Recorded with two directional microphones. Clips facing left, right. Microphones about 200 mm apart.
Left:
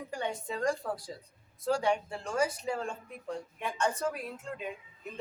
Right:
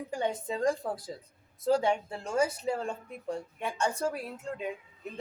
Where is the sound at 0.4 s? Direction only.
20° right (ahead or behind).